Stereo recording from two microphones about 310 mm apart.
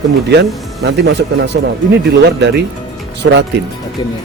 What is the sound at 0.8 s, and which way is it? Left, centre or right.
A man's voice, right.